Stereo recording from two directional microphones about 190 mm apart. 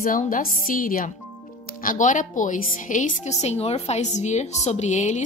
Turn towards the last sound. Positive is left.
turn(degrees=40)  # may be behind; listen again after turning